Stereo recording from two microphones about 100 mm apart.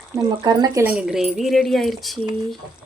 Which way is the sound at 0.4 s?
40° right (ahead or behind).